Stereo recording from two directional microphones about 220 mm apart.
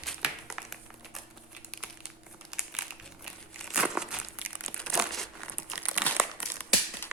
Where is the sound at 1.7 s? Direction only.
5° right (ahead or behind).